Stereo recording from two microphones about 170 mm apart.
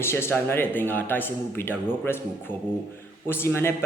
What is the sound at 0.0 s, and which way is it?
A man's voice, 15° left (ahead or behind).